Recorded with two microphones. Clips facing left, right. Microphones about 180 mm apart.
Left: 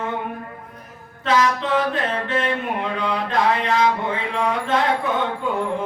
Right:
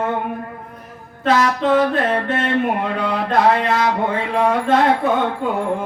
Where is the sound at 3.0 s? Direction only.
45° right (ahead or behind).